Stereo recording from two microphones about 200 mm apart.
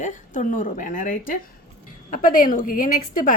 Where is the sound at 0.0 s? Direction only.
40° left (ahead or behind).